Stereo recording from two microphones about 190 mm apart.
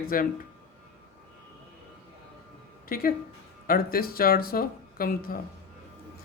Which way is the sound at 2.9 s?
50° left (ahead or behind).